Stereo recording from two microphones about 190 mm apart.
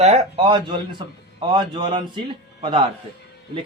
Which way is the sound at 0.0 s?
35° right (ahead or behind).